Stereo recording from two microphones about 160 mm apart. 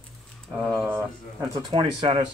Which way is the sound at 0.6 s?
5° left (ahead or behind).